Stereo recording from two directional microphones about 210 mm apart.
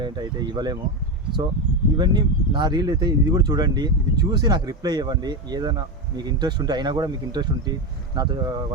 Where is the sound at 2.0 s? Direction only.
20° right (ahead or behind).